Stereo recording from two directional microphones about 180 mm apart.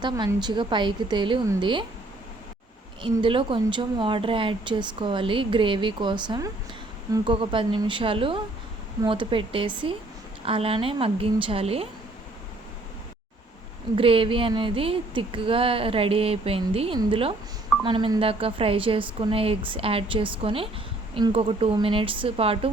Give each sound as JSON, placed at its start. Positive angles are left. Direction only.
{"t": 0.0, "sound": "speech", "side_deg": -25}
{"t": 3.0, "sound": "speech", "side_deg": -30}
{"t": 13.9, "sound": "speech", "side_deg": -30}